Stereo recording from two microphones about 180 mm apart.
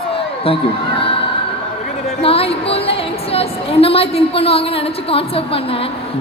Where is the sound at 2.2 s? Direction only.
30° left (ahead or behind).